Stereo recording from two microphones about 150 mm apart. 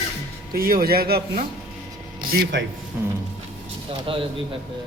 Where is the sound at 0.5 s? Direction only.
80° right.